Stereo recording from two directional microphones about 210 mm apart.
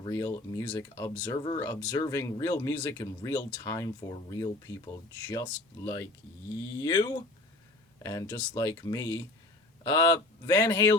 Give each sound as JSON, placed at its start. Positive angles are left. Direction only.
{"t": 0.0, "sound": "speech", "side_deg": 15}